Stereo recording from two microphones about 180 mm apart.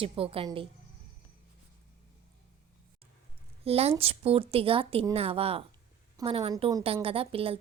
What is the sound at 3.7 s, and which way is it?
Speech, 35° right (ahead or behind).